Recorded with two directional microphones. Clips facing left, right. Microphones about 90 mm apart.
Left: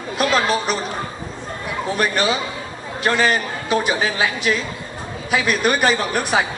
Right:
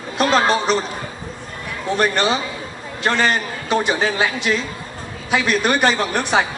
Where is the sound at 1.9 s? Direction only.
5° left (ahead or behind).